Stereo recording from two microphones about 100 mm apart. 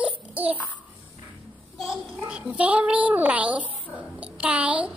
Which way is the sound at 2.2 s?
10° right (ahead or behind).